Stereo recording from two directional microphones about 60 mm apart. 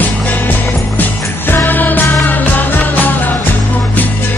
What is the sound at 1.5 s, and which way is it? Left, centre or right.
Music, left.